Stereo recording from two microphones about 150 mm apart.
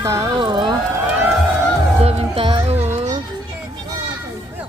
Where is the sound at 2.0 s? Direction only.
40° right (ahead or behind).